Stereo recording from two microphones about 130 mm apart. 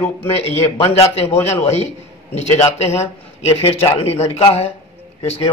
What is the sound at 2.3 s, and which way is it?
Speech, 55° left (ahead or behind).